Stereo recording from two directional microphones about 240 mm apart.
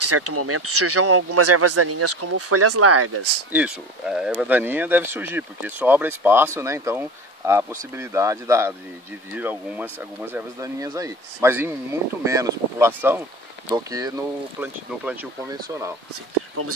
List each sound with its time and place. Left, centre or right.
0.0 s speech: right
3.5 s speech: centre